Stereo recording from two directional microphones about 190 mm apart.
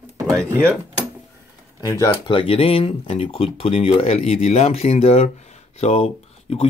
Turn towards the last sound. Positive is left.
turn(degrees=30)  # may be behind; listen again after turning